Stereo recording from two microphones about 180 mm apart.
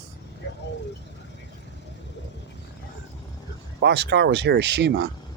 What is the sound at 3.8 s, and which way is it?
Speech, 65° right (ahead or behind).